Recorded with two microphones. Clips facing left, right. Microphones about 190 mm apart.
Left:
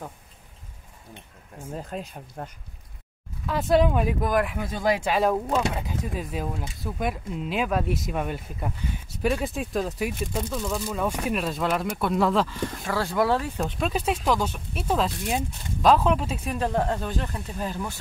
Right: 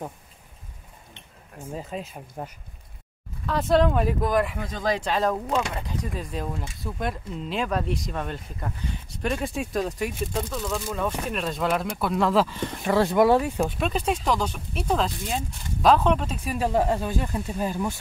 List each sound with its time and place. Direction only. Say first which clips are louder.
1.7 s speech: even; centre (ahead or behind)
12.8 s speech: right 6 dB; 20° right (ahead or behind)
13.6 s speech: right 2 dB; centre (ahead or behind)
16.5 s speech: right 3 dB; 10° right (ahead or behind)